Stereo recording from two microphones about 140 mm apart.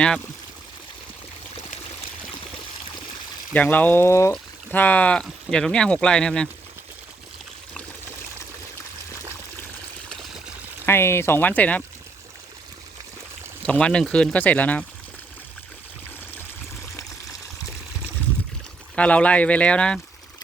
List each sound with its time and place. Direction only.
3.5 s speech: 10° left (ahead or behind)
10.1 s a sound: centre (ahead or behind)
10.8 s speech: 15° left (ahead or behind)
13.6 s speech: 10° left (ahead or behind)
18.9 s speech: 10° left (ahead or behind)